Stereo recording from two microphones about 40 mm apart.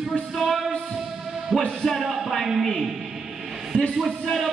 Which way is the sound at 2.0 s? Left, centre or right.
Centre.